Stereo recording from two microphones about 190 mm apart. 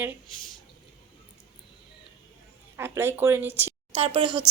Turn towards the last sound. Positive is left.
turn(degrees=-25)  # may be behind; listen again after turning